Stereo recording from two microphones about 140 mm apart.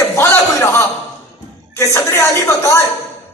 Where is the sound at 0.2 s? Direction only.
15° left (ahead or behind).